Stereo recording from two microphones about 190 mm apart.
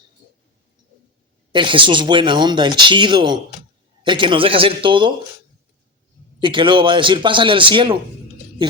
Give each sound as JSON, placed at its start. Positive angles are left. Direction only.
{"t": 1.5, "sound": "speech", "side_deg": -25}
{"t": 6.4, "sound": "speech", "side_deg": -25}